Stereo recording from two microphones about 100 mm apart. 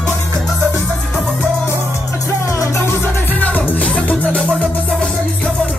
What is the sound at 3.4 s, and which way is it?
Music, 15° left (ahead or behind).